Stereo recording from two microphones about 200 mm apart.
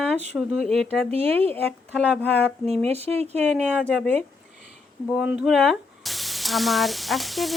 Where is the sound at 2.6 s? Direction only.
30° right (ahead or behind).